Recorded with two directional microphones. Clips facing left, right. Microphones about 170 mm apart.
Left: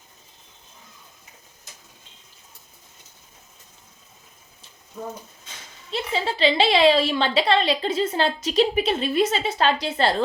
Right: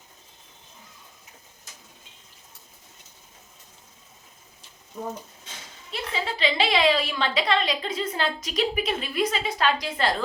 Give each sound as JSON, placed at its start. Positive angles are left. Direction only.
{"t": 4.9, "sound": "speech", "side_deg": 0}
{"t": 5.9, "sound": "a woman's voice", "side_deg": 30}